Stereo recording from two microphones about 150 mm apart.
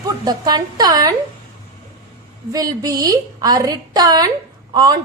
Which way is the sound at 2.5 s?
25° right (ahead or behind).